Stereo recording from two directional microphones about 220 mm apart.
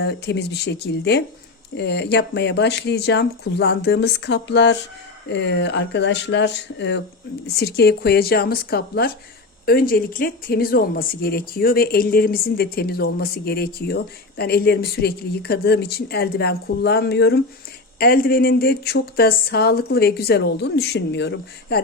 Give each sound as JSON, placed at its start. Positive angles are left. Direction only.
{"t": 0.0, "sound": "speech", "side_deg": 50}